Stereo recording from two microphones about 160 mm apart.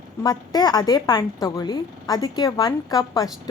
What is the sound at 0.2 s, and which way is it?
A woman's voice, 25° left (ahead or behind).